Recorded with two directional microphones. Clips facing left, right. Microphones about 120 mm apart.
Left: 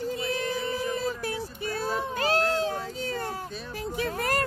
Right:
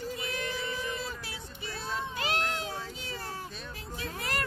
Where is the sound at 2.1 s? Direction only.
40° left (ahead or behind).